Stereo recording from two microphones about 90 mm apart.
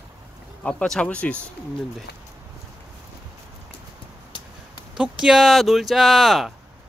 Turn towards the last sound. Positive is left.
turn(degrees=0)  # may be behind; listen again after turning